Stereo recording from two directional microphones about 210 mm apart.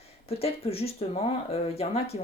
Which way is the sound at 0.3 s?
30° left (ahead or behind).